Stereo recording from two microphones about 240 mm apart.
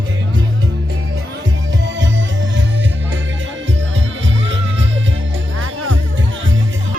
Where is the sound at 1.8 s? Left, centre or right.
Right.